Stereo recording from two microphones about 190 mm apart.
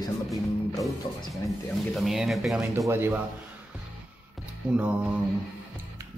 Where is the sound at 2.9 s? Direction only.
10° right (ahead or behind).